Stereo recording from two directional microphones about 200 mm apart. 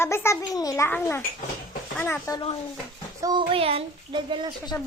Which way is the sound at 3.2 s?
25° right (ahead or behind).